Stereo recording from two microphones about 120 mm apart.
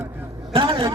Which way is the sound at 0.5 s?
45° right (ahead or behind).